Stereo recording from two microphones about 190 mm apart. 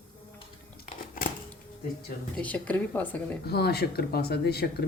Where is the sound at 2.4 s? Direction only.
10° left (ahead or behind).